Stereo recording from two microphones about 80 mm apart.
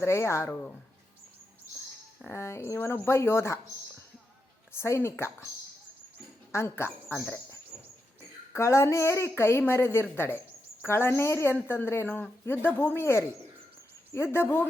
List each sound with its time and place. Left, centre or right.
0.0 s a woman's voice: left
2.3 s a woman's voice: left
4.7 s a woman's voice: left
6.5 s a woman's voice: left
8.5 s a woman's voice: left